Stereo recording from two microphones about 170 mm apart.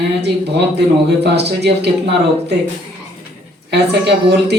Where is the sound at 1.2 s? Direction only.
75° right (ahead or behind).